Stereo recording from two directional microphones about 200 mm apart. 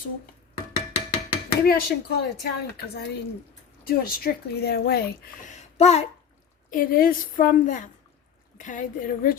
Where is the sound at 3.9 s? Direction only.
50° left (ahead or behind).